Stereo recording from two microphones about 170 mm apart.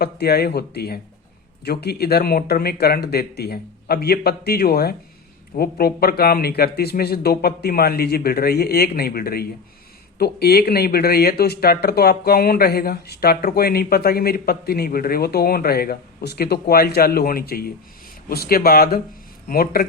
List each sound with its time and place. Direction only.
0.0 s speech: 70° left (ahead or behind)